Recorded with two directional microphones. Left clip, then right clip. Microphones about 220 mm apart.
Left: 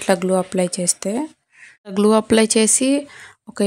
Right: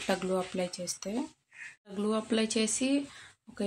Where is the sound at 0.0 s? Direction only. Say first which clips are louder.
Left 13 dB; 40° left (ahead or behind).